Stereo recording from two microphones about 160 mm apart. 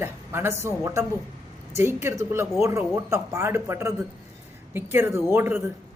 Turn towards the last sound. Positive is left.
turn(degrees=-15)  # may be behind; listen again after turning